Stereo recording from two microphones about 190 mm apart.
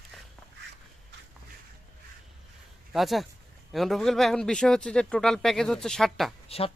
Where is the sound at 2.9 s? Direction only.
Centre (ahead or behind).